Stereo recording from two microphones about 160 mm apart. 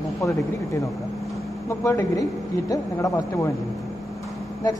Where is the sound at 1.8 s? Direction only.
20° left (ahead or behind).